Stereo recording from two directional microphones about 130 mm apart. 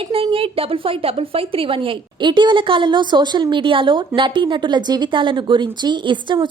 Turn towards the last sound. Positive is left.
turn(degrees=-35)  # may be behind; listen again after turning